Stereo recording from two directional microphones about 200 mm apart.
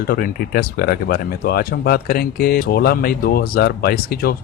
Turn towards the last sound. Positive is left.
turn(degrees=50)  # may be behind; listen again after turning